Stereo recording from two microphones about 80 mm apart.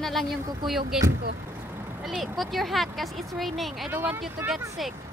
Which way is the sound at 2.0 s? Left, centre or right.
Centre.